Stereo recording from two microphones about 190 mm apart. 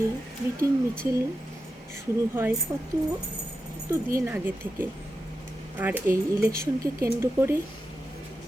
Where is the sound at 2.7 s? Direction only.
20° right (ahead or behind).